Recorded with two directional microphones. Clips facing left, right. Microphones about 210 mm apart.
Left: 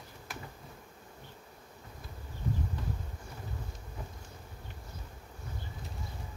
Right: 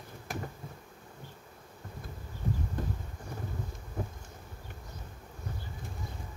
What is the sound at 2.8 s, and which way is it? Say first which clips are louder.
Bee: right 4 dB; 50° right (ahead or behind).